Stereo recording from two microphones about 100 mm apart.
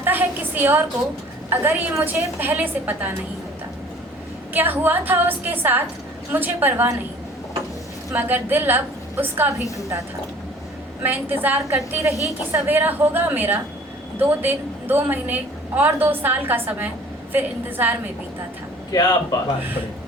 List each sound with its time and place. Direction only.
0.0 s a sound: 20° right (ahead or behind)
1.5 s a woman's voice: 20° right (ahead or behind)
4.5 s a woman's voice: 20° right (ahead or behind)
8.1 s a woman's voice: 20° right (ahead or behind)
11.0 s a woman's voice: 20° right (ahead or behind)
18.9 s speech: 40° left (ahead or behind)